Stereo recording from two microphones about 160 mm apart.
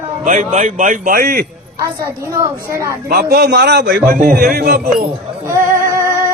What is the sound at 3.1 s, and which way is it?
A man's voice, 70° right (ahead or behind).